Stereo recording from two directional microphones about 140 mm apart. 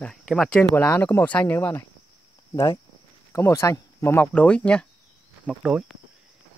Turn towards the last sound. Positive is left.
turn(degrees=-5)  # may be behind; listen again after turning